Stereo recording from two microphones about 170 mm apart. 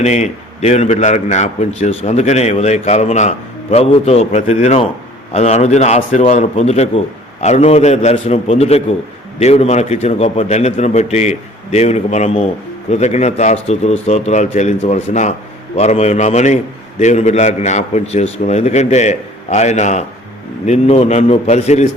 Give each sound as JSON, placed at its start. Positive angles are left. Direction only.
{"t": 0.0, "sound": "a man's voice", "side_deg": 40}